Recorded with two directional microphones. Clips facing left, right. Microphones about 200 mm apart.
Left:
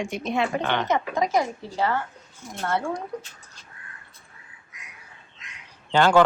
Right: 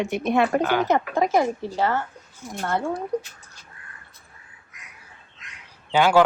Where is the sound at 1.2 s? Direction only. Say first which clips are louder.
Right 2 dB; 55° right (ahead or behind).